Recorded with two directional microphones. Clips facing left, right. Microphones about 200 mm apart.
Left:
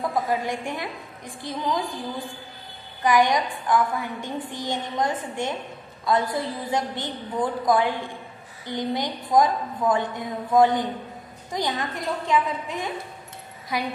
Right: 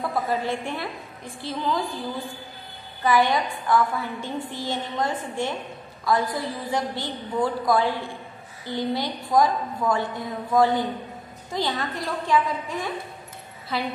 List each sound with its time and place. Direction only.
0.1 s a woman's voice: 15° left (ahead or behind)
3.0 s a woman's voice: 15° left (ahead or behind)